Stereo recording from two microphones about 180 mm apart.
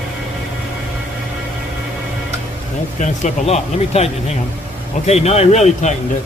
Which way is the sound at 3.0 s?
40° left (ahead or behind).